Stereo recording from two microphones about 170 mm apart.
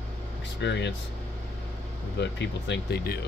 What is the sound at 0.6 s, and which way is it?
Speech, 90° left.